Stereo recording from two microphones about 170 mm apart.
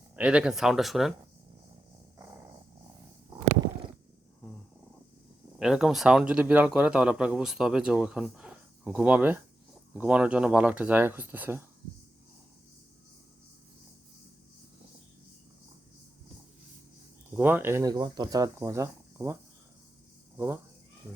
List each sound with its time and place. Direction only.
0.2 s speech: 5° right (ahead or behind)
5.5 s speech: 5° right (ahead or behind)
17.3 s speech: 10° right (ahead or behind)